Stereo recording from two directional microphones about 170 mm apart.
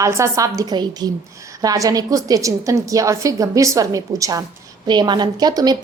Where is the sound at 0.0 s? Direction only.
15° right (ahead or behind).